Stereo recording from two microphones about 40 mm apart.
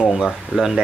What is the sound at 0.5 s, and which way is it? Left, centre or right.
Speech, right.